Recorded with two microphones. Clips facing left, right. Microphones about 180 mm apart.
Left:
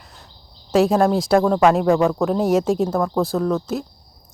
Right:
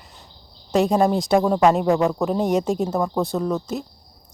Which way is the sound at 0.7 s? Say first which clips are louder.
Left 2 dB; centre (ahead or behind).